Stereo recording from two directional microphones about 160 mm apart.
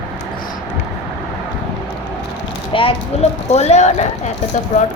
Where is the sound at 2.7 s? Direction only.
35° left (ahead or behind).